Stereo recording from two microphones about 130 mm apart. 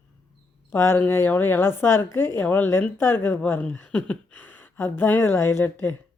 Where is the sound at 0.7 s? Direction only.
20° left (ahead or behind).